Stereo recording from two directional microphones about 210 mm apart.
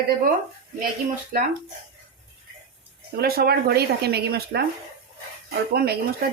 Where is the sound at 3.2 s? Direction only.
50° right (ahead or behind).